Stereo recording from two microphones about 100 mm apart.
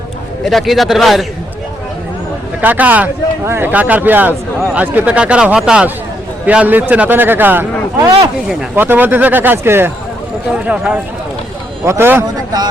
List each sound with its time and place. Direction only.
0.4 s a man's voice: centre (ahead or behind)
2.6 s a man's voice: 15° right (ahead or behind)
8.7 s a man's voice: 20° right (ahead or behind)
10.5 s speech: 10° right (ahead or behind)
11.9 s a man's voice: 20° right (ahead or behind)